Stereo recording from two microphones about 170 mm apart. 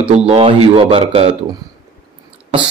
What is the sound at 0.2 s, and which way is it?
A man's voice, 35° right (ahead or behind).